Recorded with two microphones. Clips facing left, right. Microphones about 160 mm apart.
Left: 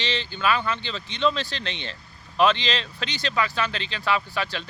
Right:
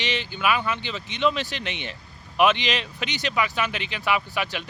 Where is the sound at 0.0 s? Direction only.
15° right (ahead or behind).